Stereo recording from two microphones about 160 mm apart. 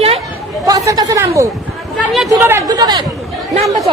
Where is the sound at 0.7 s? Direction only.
20° right (ahead or behind).